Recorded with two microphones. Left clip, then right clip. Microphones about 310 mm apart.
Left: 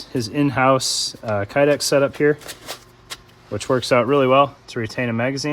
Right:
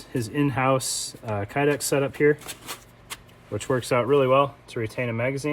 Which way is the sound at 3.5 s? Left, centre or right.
Left.